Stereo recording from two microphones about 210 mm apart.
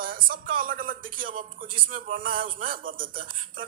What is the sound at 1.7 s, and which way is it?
Speech, 25° right (ahead or behind).